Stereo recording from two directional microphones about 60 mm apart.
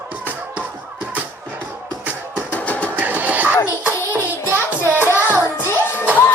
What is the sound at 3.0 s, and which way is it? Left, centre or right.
Music, right.